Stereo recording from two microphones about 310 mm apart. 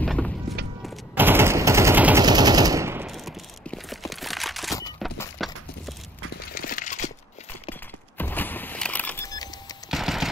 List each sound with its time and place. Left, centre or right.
0.0 s music: centre
0.8 s machine gun: centre
4.9 s a sound: centre
6.5 s a sound: left
8.2 s power windows: centre
9.8 s machine gun: centre